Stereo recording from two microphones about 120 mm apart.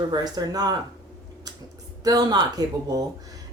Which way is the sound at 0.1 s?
35° right (ahead or behind).